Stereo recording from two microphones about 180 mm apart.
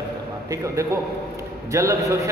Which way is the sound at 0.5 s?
15° right (ahead or behind).